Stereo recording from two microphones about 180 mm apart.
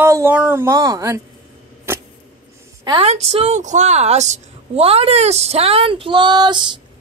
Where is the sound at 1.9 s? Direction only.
15° right (ahead or behind).